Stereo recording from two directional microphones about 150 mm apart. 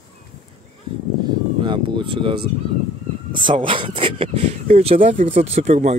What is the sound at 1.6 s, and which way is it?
Speech, 30° right (ahead or behind).